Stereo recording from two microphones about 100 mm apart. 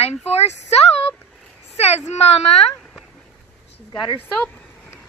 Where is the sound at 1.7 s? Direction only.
90° left.